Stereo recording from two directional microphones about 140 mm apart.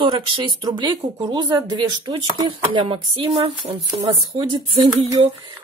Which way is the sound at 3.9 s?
30° right (ahead or behind).